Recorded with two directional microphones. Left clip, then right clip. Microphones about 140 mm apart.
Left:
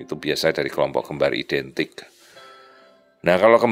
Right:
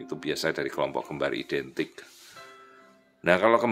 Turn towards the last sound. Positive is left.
turn(degrees=45)  # may be behind; listen again after turning